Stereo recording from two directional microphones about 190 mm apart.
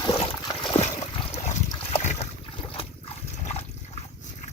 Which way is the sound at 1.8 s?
35° left (ahead or behind).